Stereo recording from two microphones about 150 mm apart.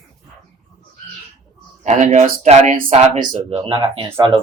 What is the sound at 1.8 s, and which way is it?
Speech, 55° right (ahead or behind).